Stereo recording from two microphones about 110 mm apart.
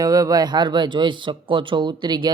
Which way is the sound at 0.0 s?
35° right (ahead or behind).